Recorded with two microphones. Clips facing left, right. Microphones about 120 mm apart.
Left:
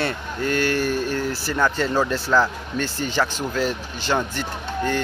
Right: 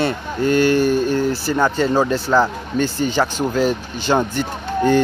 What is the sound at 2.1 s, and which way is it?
Speech, 25° right (ahead or behind).